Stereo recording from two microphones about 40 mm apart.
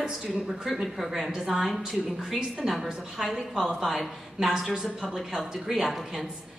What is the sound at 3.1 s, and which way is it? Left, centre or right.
A woman's voice, centre.